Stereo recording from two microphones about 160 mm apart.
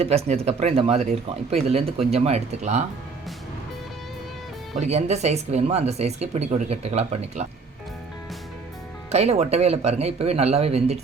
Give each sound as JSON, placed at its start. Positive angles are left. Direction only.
{"t": 0.0, "sound": "speech", "side_deg": -40}
{"t": 4.8, "sound": "speech", "side_deg": -45}
{"t": 9.1, "sound": "speech", "side_deg": -40}